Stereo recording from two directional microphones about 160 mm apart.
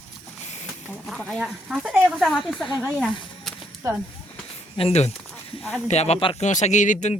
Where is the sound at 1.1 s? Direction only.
Centre (ahead or behind).